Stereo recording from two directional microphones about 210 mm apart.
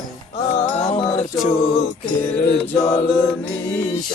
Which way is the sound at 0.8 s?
30° left (ahead or behind).